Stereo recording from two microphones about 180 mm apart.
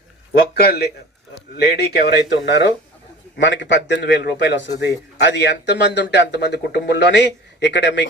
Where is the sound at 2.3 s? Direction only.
75° left (ahead or behind).